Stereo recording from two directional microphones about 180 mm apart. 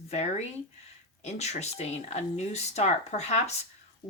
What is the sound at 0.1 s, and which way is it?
Speech, 35° left (ahead or behind).